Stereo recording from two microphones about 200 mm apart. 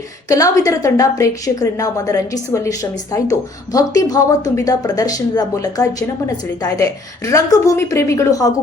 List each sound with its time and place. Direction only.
0.3 s a woman's voice: 15° left (ahead or behind)